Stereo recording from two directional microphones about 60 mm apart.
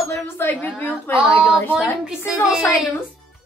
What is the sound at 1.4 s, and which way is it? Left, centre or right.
Speech, centre.